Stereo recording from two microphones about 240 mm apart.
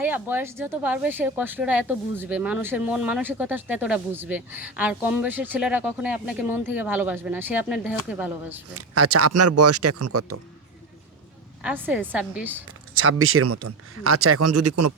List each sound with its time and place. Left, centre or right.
0.0 s speech: centre
8.7 s speech: right
11.6 s a woman's voice: centre
13.0 s speech: right